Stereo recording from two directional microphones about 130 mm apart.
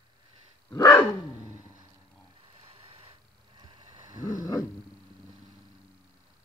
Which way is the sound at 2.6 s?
45° right (ahead or behind).